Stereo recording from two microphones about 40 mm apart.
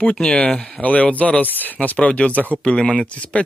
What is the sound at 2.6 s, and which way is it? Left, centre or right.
Speech, left.